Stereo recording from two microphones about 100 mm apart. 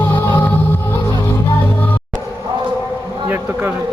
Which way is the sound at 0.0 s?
25° left (ahead or behind).